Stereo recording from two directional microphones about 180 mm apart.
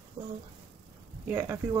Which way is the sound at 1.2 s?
15° right (ahead or behind).